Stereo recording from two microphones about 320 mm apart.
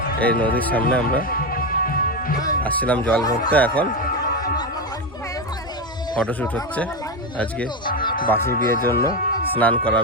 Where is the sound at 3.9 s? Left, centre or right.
Left.